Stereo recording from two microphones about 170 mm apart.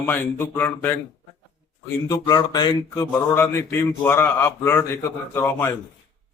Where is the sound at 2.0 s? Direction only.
20° left (ahead or behind).